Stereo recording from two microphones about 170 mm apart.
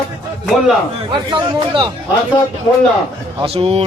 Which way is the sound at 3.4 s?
35° right (ahead or behind).